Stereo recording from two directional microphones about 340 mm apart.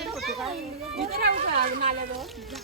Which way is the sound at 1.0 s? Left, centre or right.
Right.